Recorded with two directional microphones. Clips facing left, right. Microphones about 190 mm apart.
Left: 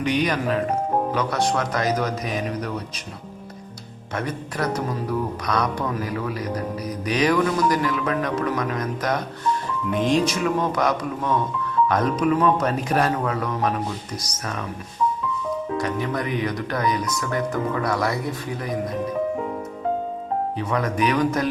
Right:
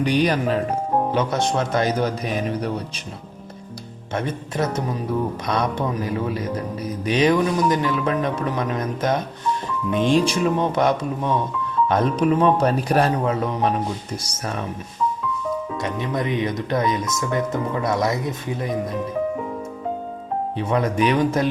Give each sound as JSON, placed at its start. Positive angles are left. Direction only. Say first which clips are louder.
{"t": 0.0, "sound": "speech", "louder": "right 3 dB", "side_deg": -35}
{"t": 4.1, "sound": "speech", "louder": "right 2 dB", "side_deg": -25}
{"t": 15.8, "sound": "speech", "louder": "even", "side_deg": -20}
{"t": 20.6, "sound": "speech", "louder": "right 5 dB", "side_deg": -25}